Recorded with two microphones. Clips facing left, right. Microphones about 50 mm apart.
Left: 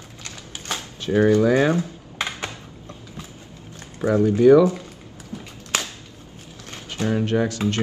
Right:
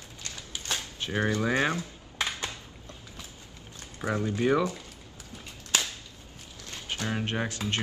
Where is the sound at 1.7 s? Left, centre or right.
Left.